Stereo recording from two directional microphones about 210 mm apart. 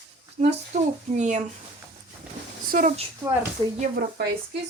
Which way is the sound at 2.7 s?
40° right (ahead or behind).